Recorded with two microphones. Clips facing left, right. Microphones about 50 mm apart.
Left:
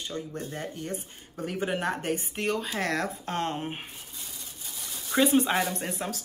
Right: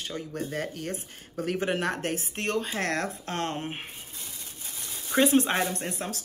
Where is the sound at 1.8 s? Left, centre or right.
Right.